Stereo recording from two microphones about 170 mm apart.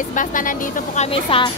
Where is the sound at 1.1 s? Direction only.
30° left (ahead or behind).